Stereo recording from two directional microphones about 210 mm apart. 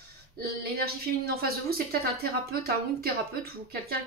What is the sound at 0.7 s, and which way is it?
Speech, 45° right (ahead or behind).